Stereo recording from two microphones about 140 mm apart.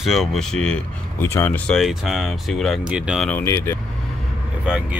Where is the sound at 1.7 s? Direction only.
Centre (ahead or behind).